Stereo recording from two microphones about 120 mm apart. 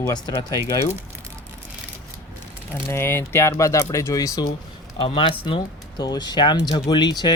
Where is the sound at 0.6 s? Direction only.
30° right (ahead or behind).